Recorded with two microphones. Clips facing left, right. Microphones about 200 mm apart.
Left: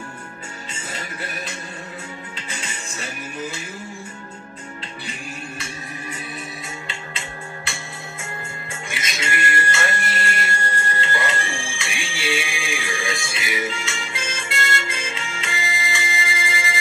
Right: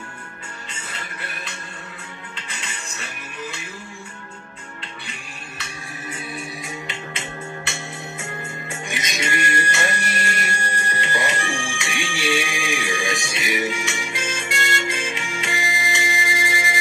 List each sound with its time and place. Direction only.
6.1 s music: 15° right (ahead or behind)